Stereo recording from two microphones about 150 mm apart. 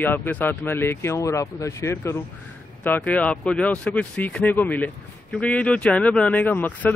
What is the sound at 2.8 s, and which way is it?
Speech, 10° left (ahead or behind).